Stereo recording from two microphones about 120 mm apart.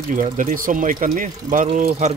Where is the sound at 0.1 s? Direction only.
90° right.